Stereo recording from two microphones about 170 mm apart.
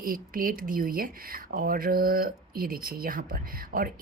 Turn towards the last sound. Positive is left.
turn(degrees=-55)  # may be behind; listen again after turning